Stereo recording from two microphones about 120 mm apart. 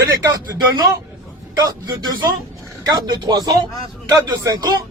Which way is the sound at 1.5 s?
35° right (ahead or behind).